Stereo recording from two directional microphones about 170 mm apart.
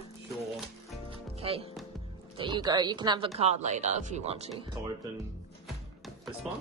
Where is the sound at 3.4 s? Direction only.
40° right (ahead or behind).